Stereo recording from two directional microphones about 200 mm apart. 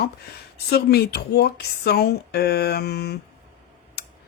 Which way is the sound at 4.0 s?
55° left (ahead or behind).